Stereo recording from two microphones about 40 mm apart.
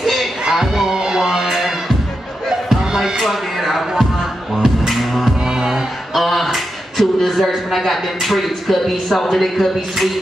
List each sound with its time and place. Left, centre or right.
0.0 s music: centre
0.5 s music: centre
2.8 s music: centre
3.2 s music: centre
5.4 s music: centre
6.1 s a man's voice: centre